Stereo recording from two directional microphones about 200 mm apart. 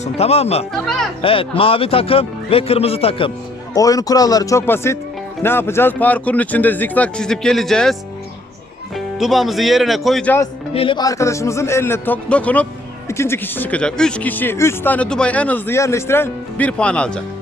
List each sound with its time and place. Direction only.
0.0 s speech: 30° left (ahead or behind)
0.7 s speech: centre (ahead or behind)
1.2 s speech: 25° left (ahead or behind)
3.8 s speech: 15° left (ahead or behind); by 7.9 s centre (ahead or behind)
9.0 s speech: centre (ahead or behind)
10.8 s speech: 25° left (ahead or behind); by 17.2 s 5° left (ahead or behind)